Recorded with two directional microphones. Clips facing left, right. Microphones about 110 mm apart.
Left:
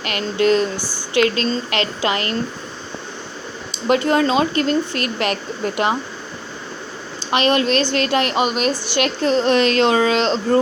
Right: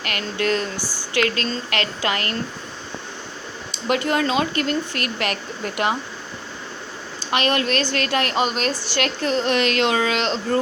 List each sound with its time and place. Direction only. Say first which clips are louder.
0.0 s speech: left 6 dB; 25° left (ahead or behind)
3.8 s speech: left 4 dB; 30° left (ahead or behind)
7.2 s speech: left 4 dB; 25° left (ahead or behind)
9.2 s speech: left 5 dB; 35° left (ahead or behind)